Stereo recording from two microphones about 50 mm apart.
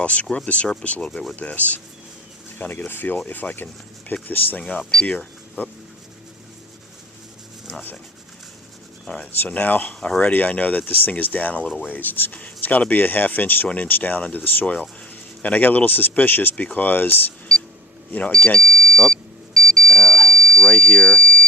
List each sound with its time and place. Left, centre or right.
0.0 s speech: left
7.7 s a sound: left
9.2 s speech: left
18.3 s speech: left
18.7 s a sound: centre
19.1 s smoke detector: centre
20.7 s speech: centre